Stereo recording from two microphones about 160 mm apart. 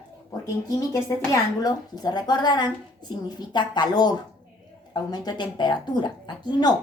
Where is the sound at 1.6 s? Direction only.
25° left (ahead or behind).